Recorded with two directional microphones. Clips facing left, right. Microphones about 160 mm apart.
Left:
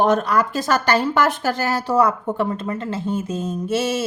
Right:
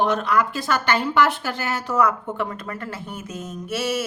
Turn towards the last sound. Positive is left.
turn(degrees=25)  # may be behind; listen again after turning